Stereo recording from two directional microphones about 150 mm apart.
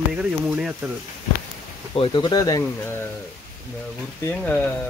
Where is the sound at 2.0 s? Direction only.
30° left (ahead or behind).